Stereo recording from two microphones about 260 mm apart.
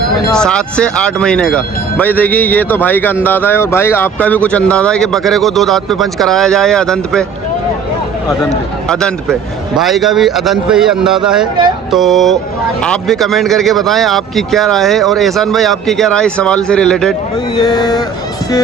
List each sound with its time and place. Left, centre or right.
0.3 s speech: centre
8.9 s speech: centre
17.6 s speech: centre